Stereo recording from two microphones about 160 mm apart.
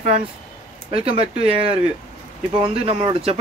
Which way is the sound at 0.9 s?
35° right (ahead or behind).